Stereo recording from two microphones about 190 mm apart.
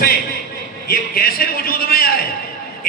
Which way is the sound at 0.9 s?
55° left (ahead or behind).